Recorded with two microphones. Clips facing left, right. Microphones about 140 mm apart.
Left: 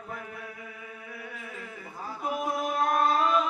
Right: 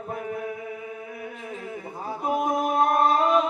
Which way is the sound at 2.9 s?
45° right (ahead or behind).